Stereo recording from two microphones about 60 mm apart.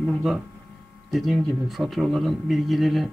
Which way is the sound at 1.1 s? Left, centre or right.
Centre.